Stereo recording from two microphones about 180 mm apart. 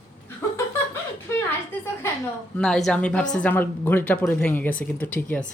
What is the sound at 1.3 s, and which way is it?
Speech, 10° left (ahead or behind).